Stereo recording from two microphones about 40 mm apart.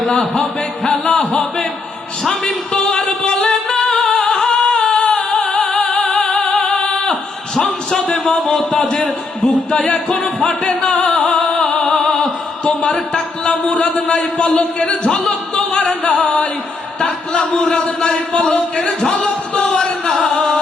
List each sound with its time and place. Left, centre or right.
0.9 s a sound: centre
2.8 s music: left
7.1 s a sound: centre
8.1 s speech: centre
8.7 s speech: left; by 10.5 s centre
10.6 s music: left
11.3 s music: centre
11.8 s opera: centre
12.6 s speech: left
15.3 s music: left
16.0 s speech: left
19.0 s a sound: centre
20.2 s music: centre